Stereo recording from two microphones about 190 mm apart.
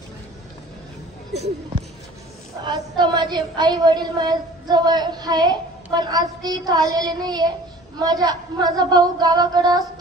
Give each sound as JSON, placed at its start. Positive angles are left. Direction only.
{"t": 2.6, "sound": "a woman's voice", "side_deg": -25}